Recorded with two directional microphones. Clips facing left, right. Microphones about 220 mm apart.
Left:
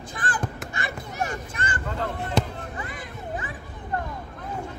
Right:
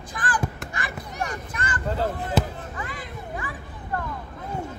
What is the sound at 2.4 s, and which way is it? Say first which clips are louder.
Fireworks: right 1 dB; 5° right (ahead or behind).